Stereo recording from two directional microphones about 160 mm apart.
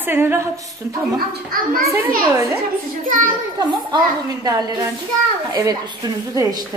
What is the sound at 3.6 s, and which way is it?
A woman's voice, 25° right (ahead or behind).